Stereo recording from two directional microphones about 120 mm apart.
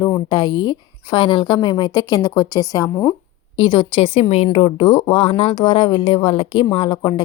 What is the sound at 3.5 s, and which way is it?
Speech, 45° left (ahead or behind).